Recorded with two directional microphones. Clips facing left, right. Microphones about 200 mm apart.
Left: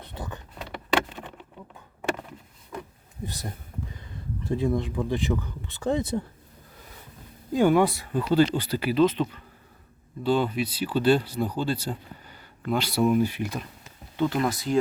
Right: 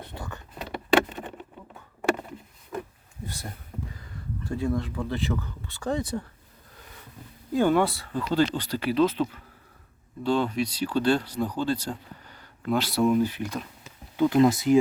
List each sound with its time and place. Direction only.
0.2 s speech: 20° left (ahead or behind)
4.4 s speech: 20° left (ahead or behind)
7.5 s speech: 15° left (ahead or behind)
14.3 s speech: 20° right (ahead or behind)